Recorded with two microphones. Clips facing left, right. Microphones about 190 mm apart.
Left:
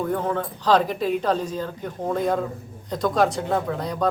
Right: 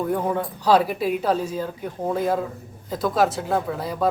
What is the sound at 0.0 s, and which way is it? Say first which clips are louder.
A man's voice: right 1 dB; 10° right (ahead or behind).